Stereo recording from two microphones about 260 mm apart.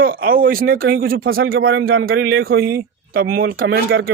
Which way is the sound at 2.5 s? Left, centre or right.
Right.